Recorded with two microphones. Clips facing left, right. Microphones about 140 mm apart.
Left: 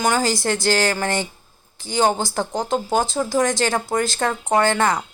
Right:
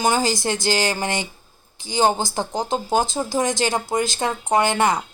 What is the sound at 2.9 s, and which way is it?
Speech, 20° right (ahead or behind).